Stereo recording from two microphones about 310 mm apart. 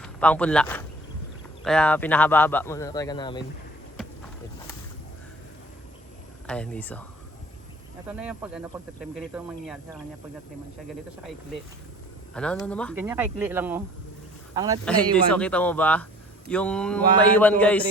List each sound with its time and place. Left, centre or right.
0.0 s speech: centre
6.5 s speech: centre
8.0 s speech: centre
12.3 s speech: centre
13.0 s a man's voice: centre
15.3 s speech: centre